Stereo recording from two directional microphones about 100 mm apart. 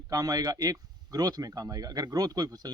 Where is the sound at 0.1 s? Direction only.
35° right (ahead or behind).